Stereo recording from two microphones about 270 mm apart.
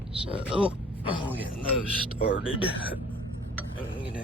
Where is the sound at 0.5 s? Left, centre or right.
Centre.